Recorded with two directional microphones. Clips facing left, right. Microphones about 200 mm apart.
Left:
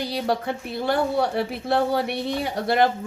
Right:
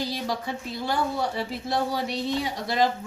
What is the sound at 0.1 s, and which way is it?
Speech, 60° left (ahead or behind).